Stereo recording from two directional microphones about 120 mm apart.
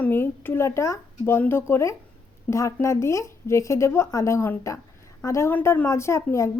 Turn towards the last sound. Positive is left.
turn(degrees=20)  # may be behind; listen again after turning